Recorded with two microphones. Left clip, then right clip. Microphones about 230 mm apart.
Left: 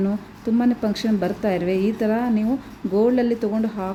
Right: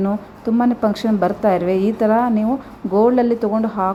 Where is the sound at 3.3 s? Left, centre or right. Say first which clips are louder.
Right 6 dB; centre.